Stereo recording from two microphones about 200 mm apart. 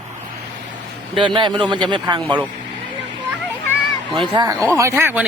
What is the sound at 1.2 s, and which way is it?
A man's voice, 25° right (ahead or behind).